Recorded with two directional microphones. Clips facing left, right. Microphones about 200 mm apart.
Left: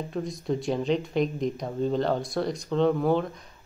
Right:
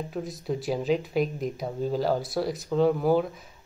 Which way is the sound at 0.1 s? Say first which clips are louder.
Left 2 dB; 5° right (ahead or behind).